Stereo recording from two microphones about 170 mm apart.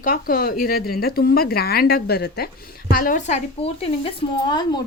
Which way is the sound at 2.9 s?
55° left (ahead or behind).